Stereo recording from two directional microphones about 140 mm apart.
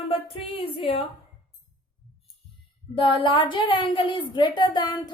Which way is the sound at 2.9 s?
40° left (ahead or behind).